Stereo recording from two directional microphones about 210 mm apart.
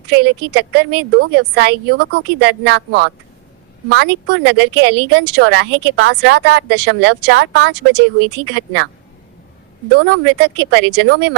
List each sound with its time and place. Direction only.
0.1 s speech: 50° right (ahead or behind)
10.0 s speech: 55° right (ahead or behind)